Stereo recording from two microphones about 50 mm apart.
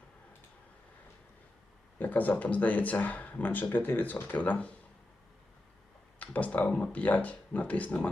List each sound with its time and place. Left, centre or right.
2.0 s speech: left
6.1 s speech: left